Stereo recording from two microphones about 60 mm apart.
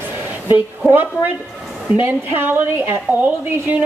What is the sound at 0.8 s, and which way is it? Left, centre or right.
A woman's voice, right.